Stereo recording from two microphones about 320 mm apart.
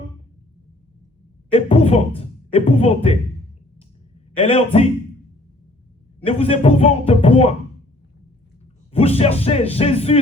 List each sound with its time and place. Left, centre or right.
1.5 s speech: centre
4.4 s speech: centre
6.2 s speech: centre
8.9 s speech: centre